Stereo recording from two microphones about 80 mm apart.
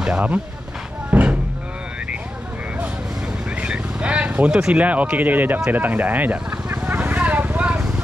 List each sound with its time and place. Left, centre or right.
0.0 s speech: centre
1.1 s cattle: centre
3.6 s vehicle: centre
4.6 s speech: centre
5.7 s vehicle: right